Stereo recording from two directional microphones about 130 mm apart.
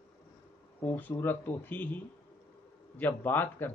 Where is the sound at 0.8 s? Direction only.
15° left (ahead or behind).